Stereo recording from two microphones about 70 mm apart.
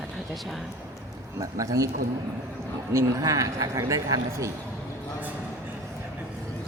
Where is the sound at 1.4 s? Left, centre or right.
Right.